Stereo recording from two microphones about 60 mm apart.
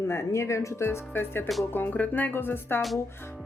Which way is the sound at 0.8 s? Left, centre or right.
Left.